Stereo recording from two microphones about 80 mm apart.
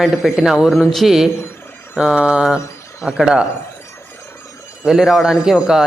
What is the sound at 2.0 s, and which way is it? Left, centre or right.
Mantra, centre.